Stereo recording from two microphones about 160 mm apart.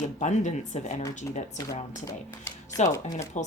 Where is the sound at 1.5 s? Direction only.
20° left (ahead or behind).